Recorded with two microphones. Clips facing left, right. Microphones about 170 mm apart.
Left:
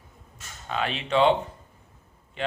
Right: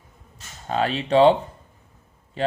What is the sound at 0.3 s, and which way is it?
Speech, 35° right (ahead or behind).